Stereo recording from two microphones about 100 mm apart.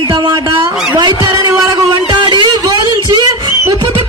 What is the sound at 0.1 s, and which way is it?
Speech, 45° right (ahead or behind).